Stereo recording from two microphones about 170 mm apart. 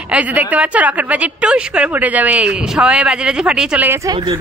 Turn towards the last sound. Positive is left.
turn(degrees=-20)  # may be behind; listen again after turning